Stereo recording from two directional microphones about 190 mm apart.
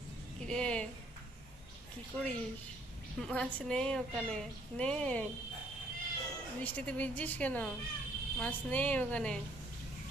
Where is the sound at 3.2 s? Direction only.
5° left (ahead or behind).